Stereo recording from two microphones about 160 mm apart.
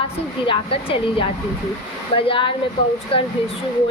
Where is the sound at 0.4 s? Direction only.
35° left (ahead or behind).